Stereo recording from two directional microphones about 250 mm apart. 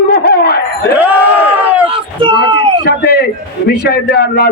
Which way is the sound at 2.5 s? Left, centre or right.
Centre.